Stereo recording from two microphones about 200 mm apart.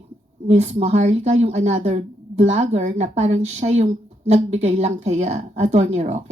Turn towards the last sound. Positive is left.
turn(degrees=-35)  # may be behind; listen again after turning